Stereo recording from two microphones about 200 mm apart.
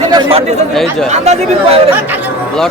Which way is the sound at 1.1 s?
35° right (ahead or behind).